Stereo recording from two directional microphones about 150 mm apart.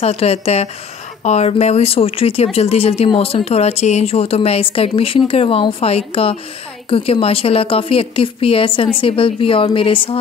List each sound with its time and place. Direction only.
0.0 s speech: 45° left (ahead or behind)